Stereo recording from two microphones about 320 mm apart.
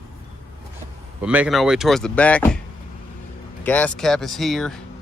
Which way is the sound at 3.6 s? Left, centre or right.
Centre.